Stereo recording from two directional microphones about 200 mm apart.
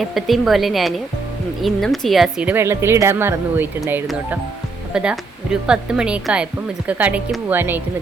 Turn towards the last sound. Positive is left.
turn(degrees=-10)  # may be behind; listen again after turning